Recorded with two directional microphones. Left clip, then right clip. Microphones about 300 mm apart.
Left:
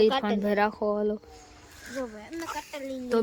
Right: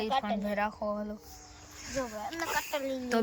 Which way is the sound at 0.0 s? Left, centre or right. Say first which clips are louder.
Left 7 dB; centre.